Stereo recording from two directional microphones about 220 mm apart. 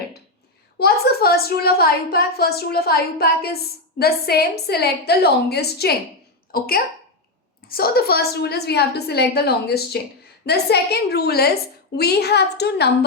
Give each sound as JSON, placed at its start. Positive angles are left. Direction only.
{"t": 0.8, "sound": "a woman's voice", "side_deg": 45}